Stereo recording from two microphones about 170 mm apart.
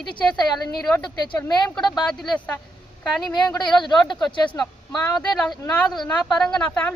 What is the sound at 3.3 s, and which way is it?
Speech, 25° left (ahead or behind).